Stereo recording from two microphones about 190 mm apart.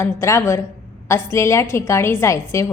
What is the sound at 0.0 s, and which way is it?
A woman's voice, 15° left (ahead or behind).